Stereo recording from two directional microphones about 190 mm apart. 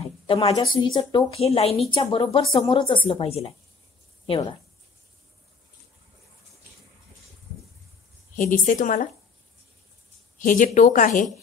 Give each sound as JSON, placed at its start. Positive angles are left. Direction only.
{"t": 0.0, "sound": "a sound", "side_deg": 30}
{"t": 0.9, "sound": "speech", "side_deg": 30}
{"t": 8.4, "sound": "speech", "side_deg": 45}
{"t": 10.4, "sound": "speech", "side_deg": 45}